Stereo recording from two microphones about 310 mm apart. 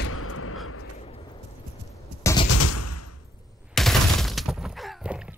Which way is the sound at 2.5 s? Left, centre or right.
Left.